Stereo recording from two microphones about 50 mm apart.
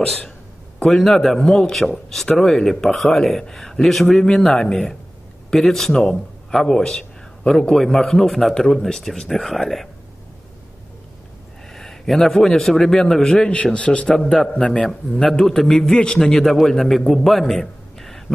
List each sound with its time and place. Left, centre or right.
0.8 s a man's voice: centre
11.7 s a man's voice: centre
13.5 s speech: left
14.0 s speech: centre
14.6 s a man's voice: centre